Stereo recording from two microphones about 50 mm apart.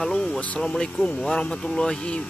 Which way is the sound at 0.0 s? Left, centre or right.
Centre.